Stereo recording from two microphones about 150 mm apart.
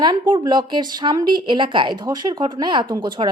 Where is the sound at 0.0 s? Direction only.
30° right (ahead or behind).